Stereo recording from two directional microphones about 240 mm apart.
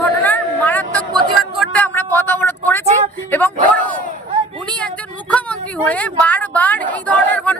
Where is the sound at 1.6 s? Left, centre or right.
Centre.